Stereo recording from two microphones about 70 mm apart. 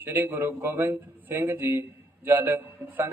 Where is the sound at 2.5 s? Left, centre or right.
Right.